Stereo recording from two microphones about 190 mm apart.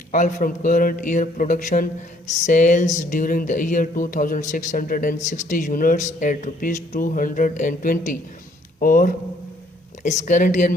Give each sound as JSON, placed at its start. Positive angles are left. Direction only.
{"t": 0.1, "sound": "speech", "side_deg": 40}